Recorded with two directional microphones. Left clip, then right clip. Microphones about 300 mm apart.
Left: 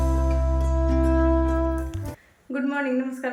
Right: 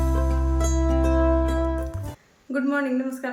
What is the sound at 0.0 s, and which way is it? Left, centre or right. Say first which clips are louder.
Music: left 1 dB; centre.